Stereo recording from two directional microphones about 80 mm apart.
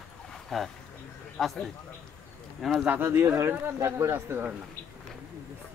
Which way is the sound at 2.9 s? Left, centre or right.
Right.